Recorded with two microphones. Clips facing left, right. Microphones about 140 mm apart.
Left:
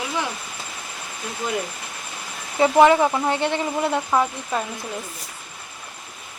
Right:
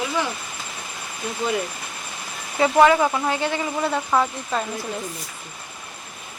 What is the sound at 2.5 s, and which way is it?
Speech, 15° left (ahead or behind).